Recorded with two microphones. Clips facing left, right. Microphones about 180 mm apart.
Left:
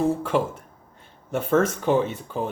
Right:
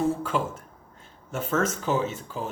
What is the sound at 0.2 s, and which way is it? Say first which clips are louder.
Speech: left 4 dB; 55° left (ahead or behind).